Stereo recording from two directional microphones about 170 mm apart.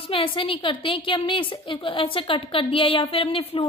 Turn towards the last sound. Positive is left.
turn(degrees=35)  # may be behind; listen again after turning